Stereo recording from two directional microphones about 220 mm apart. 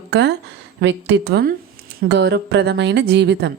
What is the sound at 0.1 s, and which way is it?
A woman's voice, 50° right (ahead or behind).